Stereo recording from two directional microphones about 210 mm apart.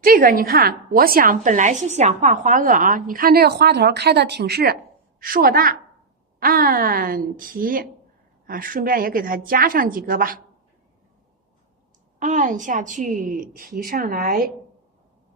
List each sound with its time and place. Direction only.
0.0 s a woman's voice: 45° right (ahead or behind)
12.2 s a woman's voice: 35° right (ahead or behind)